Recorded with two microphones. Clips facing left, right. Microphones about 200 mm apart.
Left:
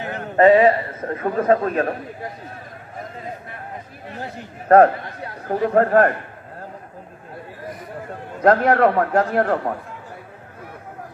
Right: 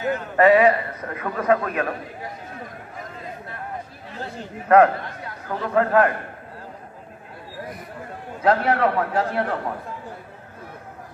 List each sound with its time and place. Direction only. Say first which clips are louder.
0.4 s a man's voice: left 3 dB; 25° left (ahead or behind)
4.6 s a man's voice: left 3 dB; 35° left (ahead or behind)
8.4 s a man's voice: left 4 dB; 50° left (ahead or behind)